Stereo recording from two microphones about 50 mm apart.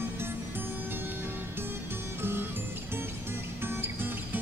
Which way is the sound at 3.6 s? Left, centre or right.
Right.